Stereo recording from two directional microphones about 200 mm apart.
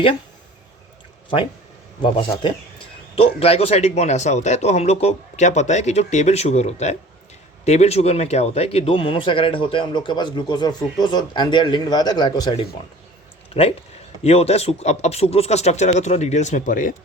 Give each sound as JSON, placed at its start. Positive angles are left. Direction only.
{"t": 3.2, "sound": "a man's voice", "side_deg": 30}